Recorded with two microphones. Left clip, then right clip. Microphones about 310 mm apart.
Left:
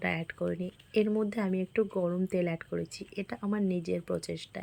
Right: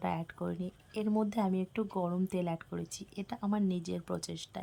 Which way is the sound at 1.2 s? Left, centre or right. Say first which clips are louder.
Left 1 dB; centre.